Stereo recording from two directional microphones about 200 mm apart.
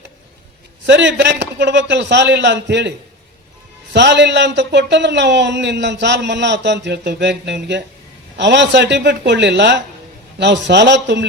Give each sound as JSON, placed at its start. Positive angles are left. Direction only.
{"t": 0.9, "sound": "a man's voice", "side_deg": -65}
{"t": 3.9, "sound": "a man's voice", "side_deg": -60}